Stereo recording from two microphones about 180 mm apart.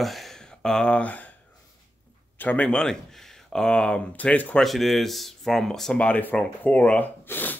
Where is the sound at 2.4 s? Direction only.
10° left (ahead or behind).